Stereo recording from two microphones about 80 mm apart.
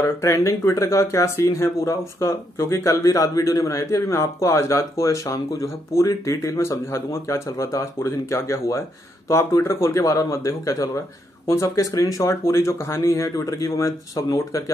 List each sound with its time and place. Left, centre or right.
0.0 s speech: left